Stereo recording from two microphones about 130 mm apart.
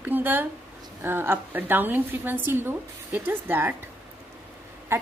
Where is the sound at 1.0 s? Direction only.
15° right (ahead or behind).